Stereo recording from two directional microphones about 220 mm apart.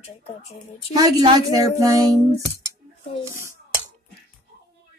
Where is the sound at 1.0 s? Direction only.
15° right (ahead or behind).